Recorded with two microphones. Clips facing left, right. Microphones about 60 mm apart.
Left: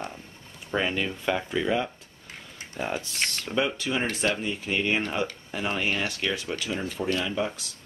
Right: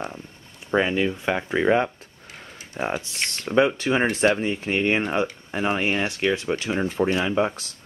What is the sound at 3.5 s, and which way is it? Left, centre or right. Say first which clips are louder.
Speech: right 8 dB; right.